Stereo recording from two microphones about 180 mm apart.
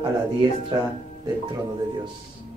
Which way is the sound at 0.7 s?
25° right (ahead or behind).